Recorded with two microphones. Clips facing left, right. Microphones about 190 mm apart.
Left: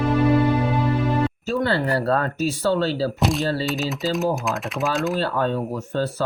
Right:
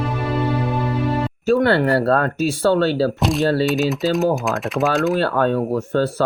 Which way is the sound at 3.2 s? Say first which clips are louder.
Right 4 dB; centre (ahead or behind).